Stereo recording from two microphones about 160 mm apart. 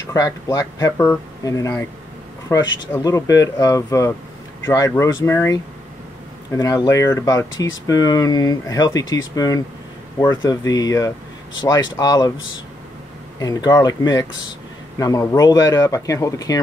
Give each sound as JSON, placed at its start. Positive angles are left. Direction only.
{"t": 0.0, "sound": "speech", "side_deg": 20}
{"t": 13.4, "sound": "speech", "side_deg": 25}